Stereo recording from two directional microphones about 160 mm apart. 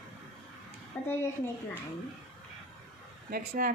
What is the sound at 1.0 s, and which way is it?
Speech, 15° left (ahead or behind).